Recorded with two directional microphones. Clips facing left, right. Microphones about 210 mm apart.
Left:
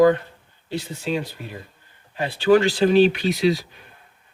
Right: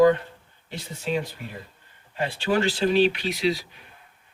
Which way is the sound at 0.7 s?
35° left (ahead or behind).